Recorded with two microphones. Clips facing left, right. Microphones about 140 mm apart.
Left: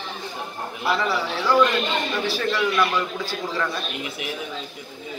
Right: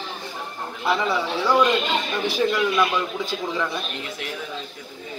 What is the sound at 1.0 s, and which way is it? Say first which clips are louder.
A man's voice: right 1 dB; 20° right (ahead or behind).